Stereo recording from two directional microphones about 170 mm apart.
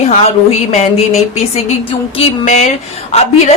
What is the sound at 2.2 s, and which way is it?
Speech, 45° left (ahead or behind).